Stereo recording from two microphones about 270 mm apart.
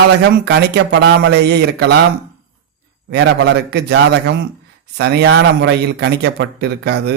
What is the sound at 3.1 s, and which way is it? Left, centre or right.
Speech, right.